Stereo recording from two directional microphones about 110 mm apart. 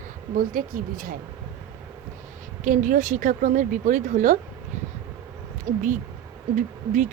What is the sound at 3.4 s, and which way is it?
Speech, 90° right.